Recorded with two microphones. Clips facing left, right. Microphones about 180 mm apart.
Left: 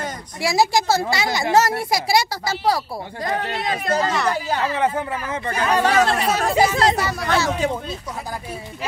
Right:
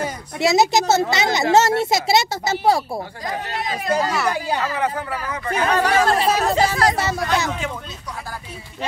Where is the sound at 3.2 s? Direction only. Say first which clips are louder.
Left 2 dB; 60° left (ahead or behind).